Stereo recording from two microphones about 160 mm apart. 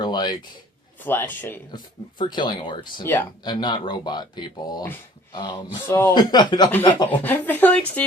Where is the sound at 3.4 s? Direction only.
25° left (ahead or behind).